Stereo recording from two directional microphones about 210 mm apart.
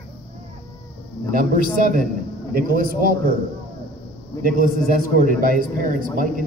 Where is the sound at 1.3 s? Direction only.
40° right (ahead or behind).